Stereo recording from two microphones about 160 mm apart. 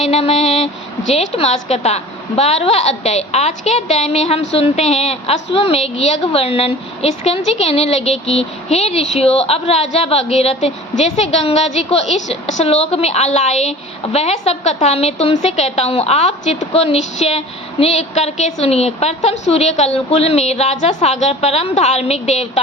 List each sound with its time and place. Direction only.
0.0 s speech: 40° left (ahead or behind)